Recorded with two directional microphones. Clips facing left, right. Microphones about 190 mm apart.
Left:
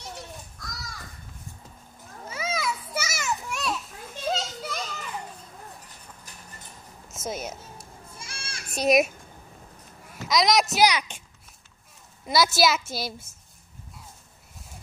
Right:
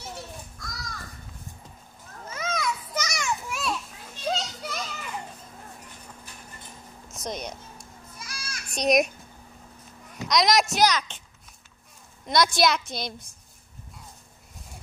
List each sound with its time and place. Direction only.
0.0 s children playing: centre (ahead or behind)
2.2 s children playing: 5° left (ahead or behind)
7.1 s music: 5° left (ahead or behind)
8.2 s goat: 25° left (ahead or behind)
8.7 s a child's voice: 5° left (ahead or behind)
10.1 s a child's voice: centre (ahead or behind)
12.3 s a child's voice: 5° left (ahead or behind)